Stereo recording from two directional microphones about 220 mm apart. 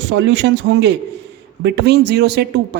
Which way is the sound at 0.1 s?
55° right (ahead or behind).